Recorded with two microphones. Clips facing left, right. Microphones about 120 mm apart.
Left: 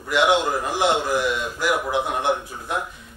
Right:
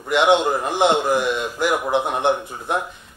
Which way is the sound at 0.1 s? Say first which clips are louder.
Right 3 dB; 20° right (ahead or behind).